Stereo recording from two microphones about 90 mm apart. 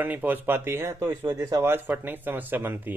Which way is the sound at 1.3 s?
45° right (ahead or behind).